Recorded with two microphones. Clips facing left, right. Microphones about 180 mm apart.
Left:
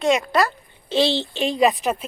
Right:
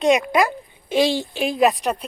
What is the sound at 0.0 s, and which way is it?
Speech, 15° right (ahead or behind).